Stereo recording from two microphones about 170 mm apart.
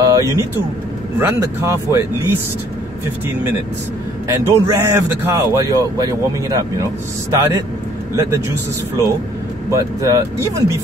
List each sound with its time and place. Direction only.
0.0 s vehicle: 20° right (ahead or behind)
1.2 s a man's voice: 15° right (ahead or behind)
4.3 s a man's voice: 20° right (ahead or behind)